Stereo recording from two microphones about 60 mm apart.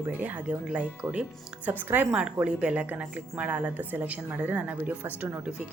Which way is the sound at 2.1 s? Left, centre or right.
Centre.